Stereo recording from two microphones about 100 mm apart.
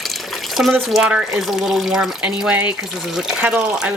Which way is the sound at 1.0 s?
5° right (ahead or behind).